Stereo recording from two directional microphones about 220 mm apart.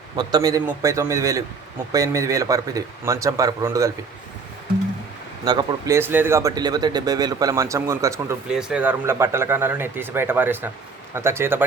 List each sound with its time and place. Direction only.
0.2 s speech: 20° right (ahead or behind)
5.5 s speech: 15° right (ahead or behind)